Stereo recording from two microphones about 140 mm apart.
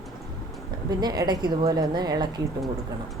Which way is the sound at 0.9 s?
30° right (ahead or behind).